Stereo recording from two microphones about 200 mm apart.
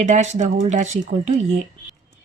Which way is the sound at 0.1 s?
35° right (ahead or behind).